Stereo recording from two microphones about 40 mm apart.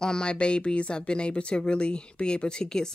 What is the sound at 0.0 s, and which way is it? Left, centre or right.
Speech, centre.